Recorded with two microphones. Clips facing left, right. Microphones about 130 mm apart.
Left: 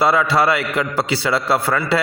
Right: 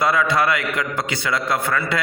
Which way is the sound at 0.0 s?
30° left (ahead or behind).